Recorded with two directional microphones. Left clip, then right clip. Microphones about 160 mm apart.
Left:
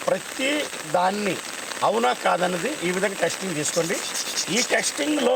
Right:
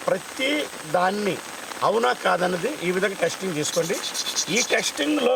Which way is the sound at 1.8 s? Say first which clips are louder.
Even; 10° right (ahead or behind).